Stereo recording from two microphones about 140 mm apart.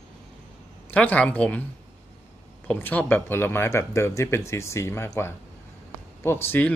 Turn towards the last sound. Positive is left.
turn(degrees=15)  # may be behind; listen again after turning